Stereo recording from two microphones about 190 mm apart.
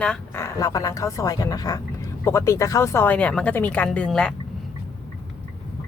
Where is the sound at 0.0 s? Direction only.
5° left (ahead or behind).